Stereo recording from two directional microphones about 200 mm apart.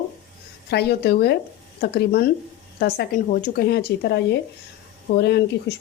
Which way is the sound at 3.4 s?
50° left (ahead or behind).